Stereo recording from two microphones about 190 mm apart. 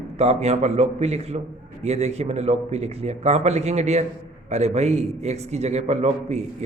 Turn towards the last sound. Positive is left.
turn(degrees=-35)  # may be behind; listen again after turning